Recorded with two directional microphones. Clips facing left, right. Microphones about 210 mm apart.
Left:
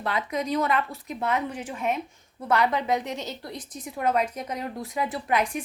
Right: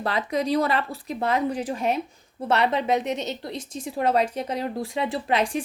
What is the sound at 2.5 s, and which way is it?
A woman's voice, 25° right (ahead or behind).